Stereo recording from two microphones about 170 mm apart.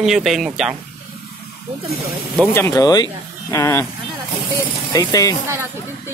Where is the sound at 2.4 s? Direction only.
15° left (ahead or behind).